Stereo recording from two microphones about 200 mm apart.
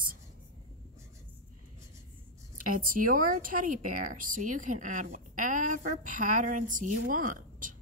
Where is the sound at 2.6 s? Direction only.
45° right (ahead or behind).